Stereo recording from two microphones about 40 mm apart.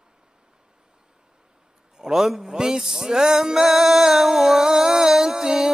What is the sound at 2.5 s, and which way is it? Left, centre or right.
Music, centre.